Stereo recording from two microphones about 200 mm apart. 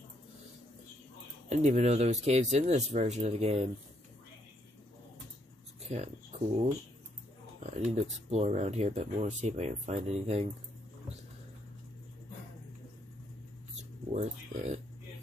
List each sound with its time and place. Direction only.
1.5 s speech: 35° right (ahead or behind)
6.3 s a sound: 35° right (ahead or behind)
7.6 s speech: 35° right (ahead or behind)
14.1 s speech: 35° right (ahead or behind)